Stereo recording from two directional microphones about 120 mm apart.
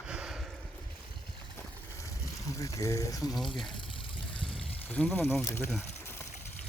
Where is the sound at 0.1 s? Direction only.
5° right (ahead or behind).